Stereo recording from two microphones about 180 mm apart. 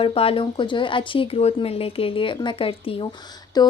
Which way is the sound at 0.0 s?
30° left (ahead or behind).